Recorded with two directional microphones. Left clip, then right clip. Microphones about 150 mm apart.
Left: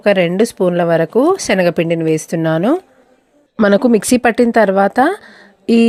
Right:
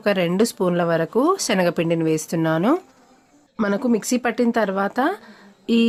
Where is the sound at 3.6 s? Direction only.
55° left (ahead or behind).